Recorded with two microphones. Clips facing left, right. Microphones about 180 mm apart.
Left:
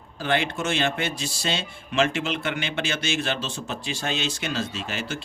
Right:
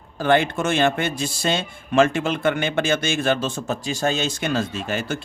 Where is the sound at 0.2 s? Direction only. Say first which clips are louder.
Right 6 dB; 50° right (ahead or behind).